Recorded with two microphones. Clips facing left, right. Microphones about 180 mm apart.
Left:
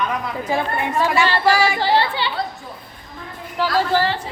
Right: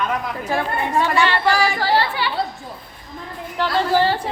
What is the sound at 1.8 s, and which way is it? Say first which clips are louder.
Speech: left 1 dB; 20° left (ahead or behind).